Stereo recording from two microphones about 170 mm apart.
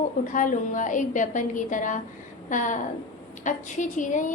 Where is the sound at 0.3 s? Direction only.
50° left (ahead or behind).